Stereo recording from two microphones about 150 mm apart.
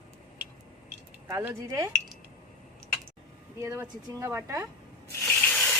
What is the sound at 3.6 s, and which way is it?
Speech, 20° right (ahead or behind).